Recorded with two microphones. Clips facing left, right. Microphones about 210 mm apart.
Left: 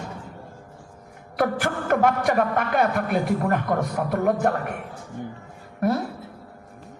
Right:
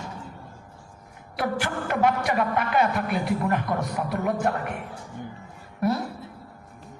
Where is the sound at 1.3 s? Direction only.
45° left (ahead or behind).